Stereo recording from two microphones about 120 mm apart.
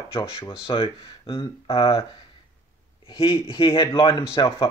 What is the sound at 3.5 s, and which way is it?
Speech, 45° left (ahead or behind).